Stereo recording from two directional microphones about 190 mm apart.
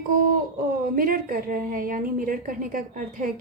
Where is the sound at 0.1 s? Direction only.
50° right (ahead or behind).